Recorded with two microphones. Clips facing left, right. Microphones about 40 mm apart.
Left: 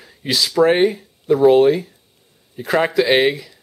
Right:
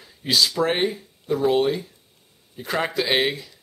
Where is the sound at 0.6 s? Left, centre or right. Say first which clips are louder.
Left 8 dB; left.